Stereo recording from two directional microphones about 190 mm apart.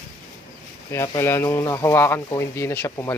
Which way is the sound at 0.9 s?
15° left (ahead or behind).